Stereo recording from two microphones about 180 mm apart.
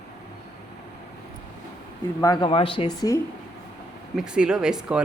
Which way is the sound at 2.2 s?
25° left (ahead or behind).